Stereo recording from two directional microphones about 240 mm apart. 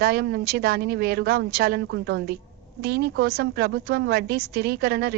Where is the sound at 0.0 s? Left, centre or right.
Right.